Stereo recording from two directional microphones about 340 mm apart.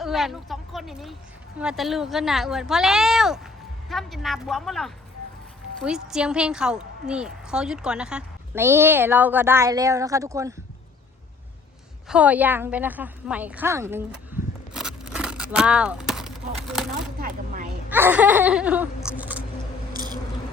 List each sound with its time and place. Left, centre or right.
0.0 s a woman's voice: centre
12.0 s a woman's voice: centre
14.7 s a sound: centre
17.2 s vehicle: right
17.8 s speech: centre
19.0 s a sound: centre